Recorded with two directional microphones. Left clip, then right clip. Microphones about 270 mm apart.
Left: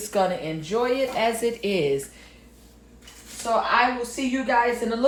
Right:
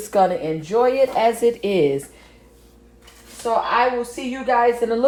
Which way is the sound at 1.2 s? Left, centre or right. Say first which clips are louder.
Right 6 dB; right.